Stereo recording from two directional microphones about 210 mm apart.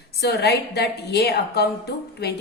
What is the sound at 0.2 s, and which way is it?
A woman's voice, 50° left (ahead or behind).